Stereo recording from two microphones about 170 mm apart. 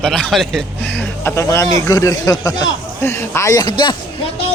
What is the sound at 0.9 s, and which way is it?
Speech, 15° left (ahead or behind).